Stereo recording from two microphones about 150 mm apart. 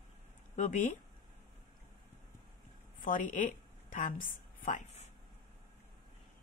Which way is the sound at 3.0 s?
65° left (ahead or behind).